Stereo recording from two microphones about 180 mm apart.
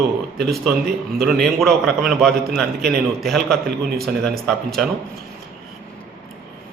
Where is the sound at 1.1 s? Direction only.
Centre (ahead or behind).